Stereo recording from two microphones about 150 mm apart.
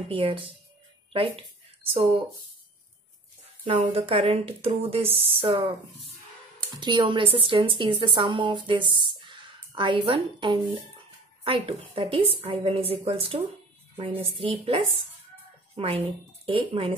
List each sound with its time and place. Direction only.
0.1 s a woman's voice: 40° right (ahead or behind)
3.6 s a woman's voice: 40° right (ahead or behind)
6.8 s a woman's voice: 30° right (ahead or behind)